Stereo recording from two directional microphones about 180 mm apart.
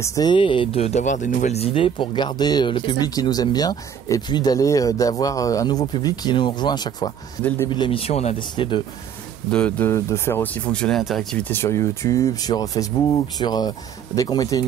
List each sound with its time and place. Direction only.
0.0 s speech: 20° left (ahead or behind)
7.7 s speech: 25° left (ahead or behind)
9.5 s speech: 5° left (ahead or behind)